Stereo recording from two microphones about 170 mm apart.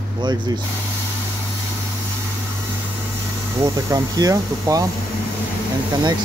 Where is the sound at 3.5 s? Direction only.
20° right (ahead or behind).